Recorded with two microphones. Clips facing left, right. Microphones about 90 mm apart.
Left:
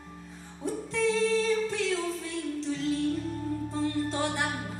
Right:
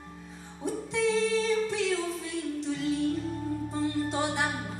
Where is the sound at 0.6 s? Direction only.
15° right (ahead or behind).